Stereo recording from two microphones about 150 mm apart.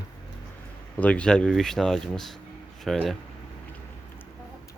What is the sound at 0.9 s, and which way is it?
Speech, 10° left (ahead or behind).